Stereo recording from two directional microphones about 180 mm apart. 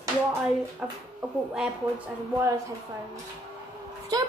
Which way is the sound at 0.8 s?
5° right (ahead or behind).